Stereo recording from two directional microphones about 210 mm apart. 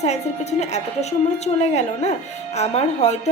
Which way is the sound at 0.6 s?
35° left (ahead or behind).